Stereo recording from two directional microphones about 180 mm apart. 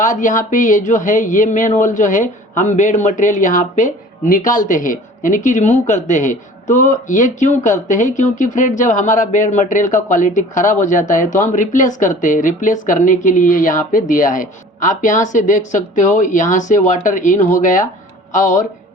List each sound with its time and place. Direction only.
0.0 s speech: 45° left (ahead or behind)